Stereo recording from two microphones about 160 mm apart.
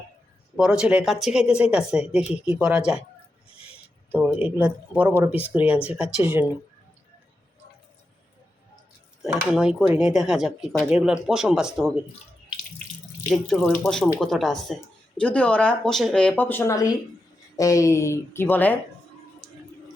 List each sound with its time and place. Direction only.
0.5 s speech: 5° right (ahead or behind)
4.1 s speech: 10° right (ahead or behind)
9.2 s speech: 5° right (ahead or behind)
13.3 s speech: 5° left (ahead or behind)
19.4 s a sound: 5° left (ahead or behind)